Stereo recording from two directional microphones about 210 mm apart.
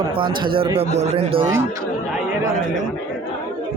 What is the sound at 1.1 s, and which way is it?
Speech, 30° right (ahead or behind).